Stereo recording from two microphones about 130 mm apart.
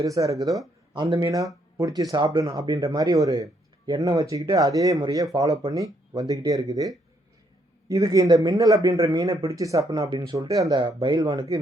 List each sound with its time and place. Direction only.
0.0 s speech: 25° right (ahead or behind)
10.8 s speech: 35° right (ahead or behind)